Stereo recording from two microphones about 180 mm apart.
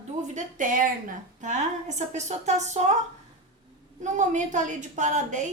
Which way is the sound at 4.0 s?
40° right (ahead or behind).